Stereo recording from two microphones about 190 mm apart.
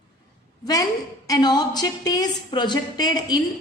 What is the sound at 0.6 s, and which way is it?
A woman's voice, 20° left (ahead or behind).